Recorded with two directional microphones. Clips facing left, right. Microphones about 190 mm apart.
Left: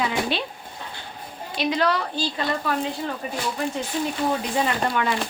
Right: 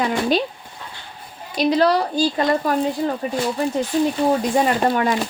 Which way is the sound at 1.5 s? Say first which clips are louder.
Right 6 dB; 35° right (ahead or behind).